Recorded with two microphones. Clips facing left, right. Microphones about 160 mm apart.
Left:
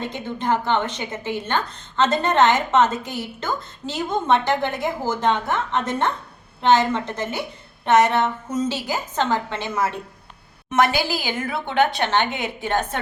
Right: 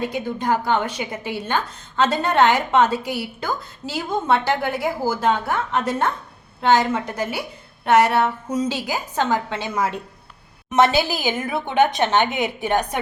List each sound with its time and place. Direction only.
0.0 s a woman's voice: 10° right (ahead or behind)
10.7 s a woman's voice: 25° right (ahead or behind)